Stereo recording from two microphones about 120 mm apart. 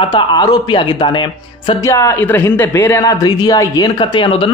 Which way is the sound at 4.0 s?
45° left (ahead or behind).